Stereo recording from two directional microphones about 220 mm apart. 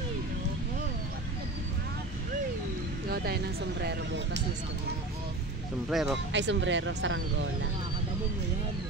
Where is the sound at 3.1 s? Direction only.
45° right (ahead or behind).